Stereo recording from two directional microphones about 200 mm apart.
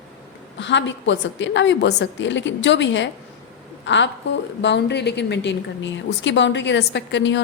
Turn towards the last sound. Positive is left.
turn(degrees=65)  # may be behind; listen again after turning